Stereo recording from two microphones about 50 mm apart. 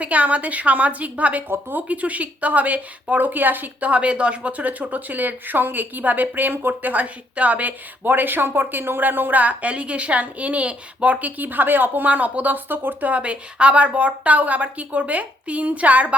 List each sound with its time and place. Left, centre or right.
0.0 s a woman's voice: right